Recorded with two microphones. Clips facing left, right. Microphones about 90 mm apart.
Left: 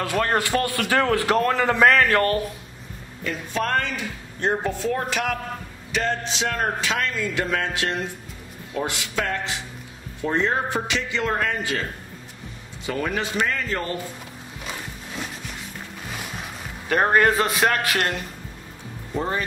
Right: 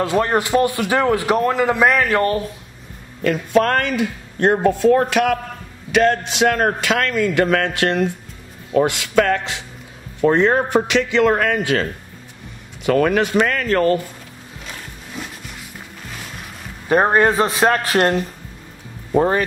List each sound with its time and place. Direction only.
0.0 s a man's voice: 25° right (ahead or behind)
3.3 s a man's voice: 60° right (ahead or behind)
12.8 s a man's voice: 65° right (ahead or behind)
15.2 s a sound: 5° right (ahead or behind)
16.9 s a man's voice: 25° right (ahead or behind)
19.1 s speech: 65° right (ahead or behind)